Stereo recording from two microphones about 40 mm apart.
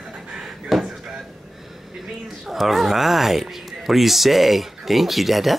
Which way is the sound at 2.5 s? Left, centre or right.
Centre.